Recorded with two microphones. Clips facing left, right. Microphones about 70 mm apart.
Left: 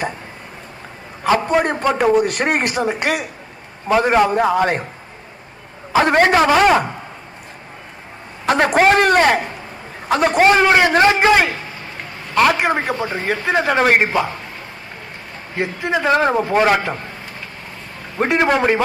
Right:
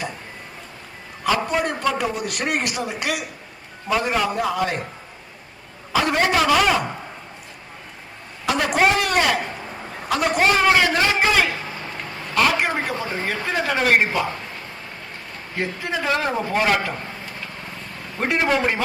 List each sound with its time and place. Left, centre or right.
1.2 s a sound: left
1.9 s a man's voice: left
5.9 s a man's voice: left
8.4 s a man's voice: left
15.5 s a man's voice: left
18.5 s a man's voice: left